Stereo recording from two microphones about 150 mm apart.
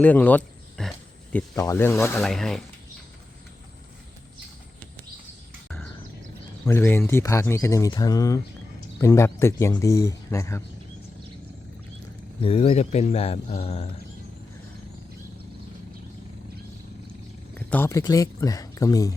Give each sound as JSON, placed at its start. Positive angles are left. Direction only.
{"t": 0.0, "sound": "wild animals", "side_deg": 10}
{"t": 1.6, "sound": "speech", "side_deg": 15}
{"t": 2.2, "sound": "speech", "side_deg": 0}
{"t": 5.6, "sound": "bird", "side_deg": 10}
{"t": 6.7, "sound": "speech", "side_deg": 15}
{"t": 12.4, "sound": "speech", "side_deg": 40}
{"t": 17.5, "sound": "wild animals", "side_deg": 10}
{"t": 17.9, "sound": "speech", "side_deg": 20}